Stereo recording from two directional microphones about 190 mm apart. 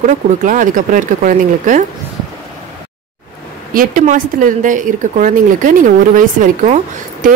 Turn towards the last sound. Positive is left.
turn(degrees=-40)  # may be behind; listen again after turning